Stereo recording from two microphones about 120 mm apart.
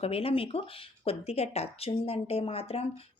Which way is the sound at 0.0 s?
55° left (ahead or behind).